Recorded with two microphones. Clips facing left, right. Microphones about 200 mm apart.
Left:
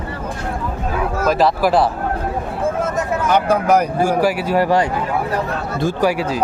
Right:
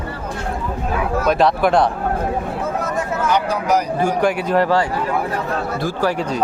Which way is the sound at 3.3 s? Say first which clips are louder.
Left 4 dB; 55° left (ahead or behind).